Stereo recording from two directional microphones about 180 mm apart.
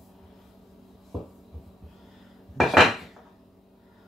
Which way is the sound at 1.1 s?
Centre (ahead or behind).